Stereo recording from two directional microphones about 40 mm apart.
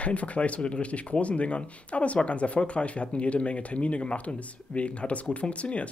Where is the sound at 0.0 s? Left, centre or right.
Left.